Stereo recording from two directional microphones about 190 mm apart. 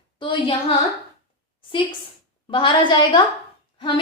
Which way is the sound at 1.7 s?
25° left (ahead or behind).